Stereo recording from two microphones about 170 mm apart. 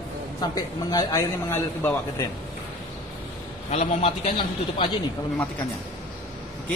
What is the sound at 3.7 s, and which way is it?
Speech, 40° left (ahead or behind).